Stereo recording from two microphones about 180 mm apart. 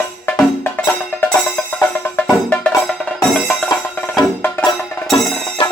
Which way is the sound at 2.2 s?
5° left (ahead or behind).